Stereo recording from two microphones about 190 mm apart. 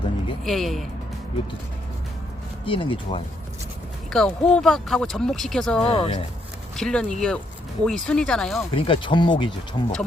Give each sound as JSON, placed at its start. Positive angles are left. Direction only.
{"t": 0.4, "sound": "speech", "side_deg": 0}
{"t": 2.6, "sound": "speech", "side_deg": 30}
{"t": 4.1, "sound": "speech", "side_deg": 0}
{"t": 5.9, "sound": "speech", "side_deg": 30}
{"t": 6.7, "sound": "speech", "side_deg": 5}
{"t": 8.7, "sound": "speech", "side_deg": 25}